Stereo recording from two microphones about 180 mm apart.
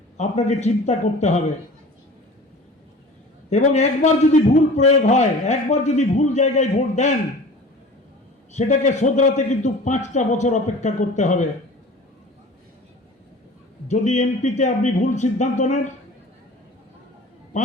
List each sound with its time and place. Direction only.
0.2 s a man's voice: 40° left (ahead or behind)
3.5 s a man's voice: 40° left (ahead or behind)
8.5 s a man's voice: 40° left (ahead or behind)
13.8 s a man's voice: 40° left (ahead or behind)
17.5 s a man's voice: 45° left (ahead or behind)